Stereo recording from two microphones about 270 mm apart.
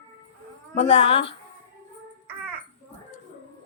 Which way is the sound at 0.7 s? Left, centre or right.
Left.